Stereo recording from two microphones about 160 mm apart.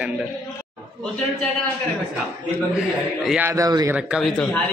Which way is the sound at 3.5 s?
20° right (ahead or behind).